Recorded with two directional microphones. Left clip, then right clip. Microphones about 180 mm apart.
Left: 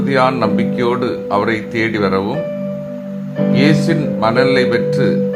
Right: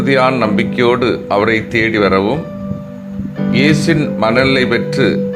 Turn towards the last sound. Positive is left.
turn(degrees=-20)  # may be behind; listen again after turning